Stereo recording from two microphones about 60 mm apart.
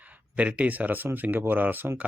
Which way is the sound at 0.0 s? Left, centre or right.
Right.